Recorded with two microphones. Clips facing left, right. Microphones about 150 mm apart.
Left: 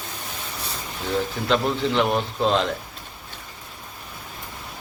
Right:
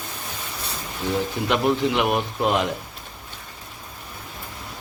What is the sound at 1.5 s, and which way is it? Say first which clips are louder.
A man's voice: right 1 dB; 15° right (ahead or behind).